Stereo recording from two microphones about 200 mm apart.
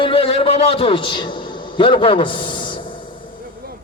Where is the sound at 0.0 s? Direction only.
30° left (ahead or behind).